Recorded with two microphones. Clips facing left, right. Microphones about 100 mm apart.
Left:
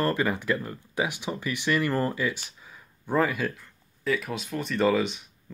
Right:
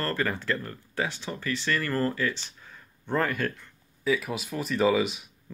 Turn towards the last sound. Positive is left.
turn(degrees=-5)  # may be behind; listen again after turning